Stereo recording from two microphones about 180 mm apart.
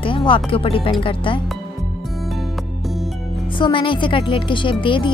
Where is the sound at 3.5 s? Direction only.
25° left (ahead or behind).